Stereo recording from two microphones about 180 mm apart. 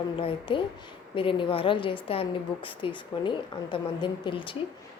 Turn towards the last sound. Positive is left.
turn(degrees=25)  # may be behind; listen again after turning